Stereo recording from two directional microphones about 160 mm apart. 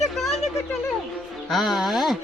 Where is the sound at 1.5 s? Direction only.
Centre (ahead or behind).